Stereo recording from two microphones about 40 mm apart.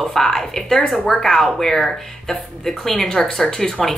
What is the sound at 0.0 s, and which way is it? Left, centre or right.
A woman's voice, centre.